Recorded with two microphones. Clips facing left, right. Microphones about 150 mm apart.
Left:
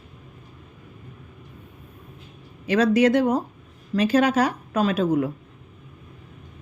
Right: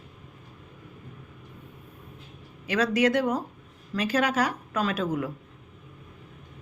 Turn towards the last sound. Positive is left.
turn(degrees=25)  # may be behind; listen again after turning